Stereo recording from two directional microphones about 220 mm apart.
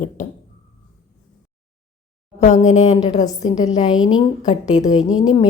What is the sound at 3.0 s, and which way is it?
Speech, 15° left (ahead or behind).